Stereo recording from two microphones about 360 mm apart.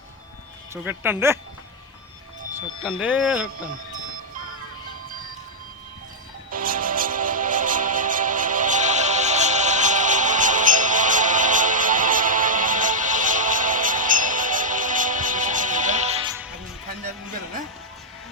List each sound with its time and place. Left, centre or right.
0.7 s speech: centre
2.5 s speech: centre
6.5 s music: right